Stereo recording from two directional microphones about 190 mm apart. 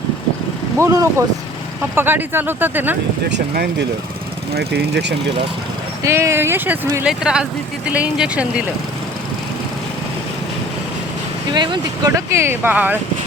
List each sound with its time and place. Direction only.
0.8 s speech: 15° right (ahead or behind)
3.2 s speech: 60° right (ahead or behind)
6.0 s speech: 15° right (ahead or behind)
11.5 s speech: 25° right (ahead or behind)